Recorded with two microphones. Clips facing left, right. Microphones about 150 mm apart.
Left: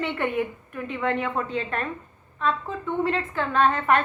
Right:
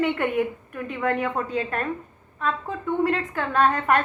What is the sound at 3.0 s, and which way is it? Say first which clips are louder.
A woman's voice: right 1 dB; 45° right (ahead or behind).